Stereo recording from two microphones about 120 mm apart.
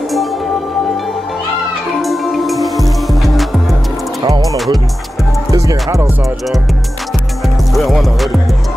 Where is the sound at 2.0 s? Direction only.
Centre (ahead or behind).